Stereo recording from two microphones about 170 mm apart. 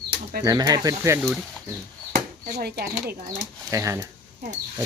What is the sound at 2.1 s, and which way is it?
Speech, 60° right (ahead or behind).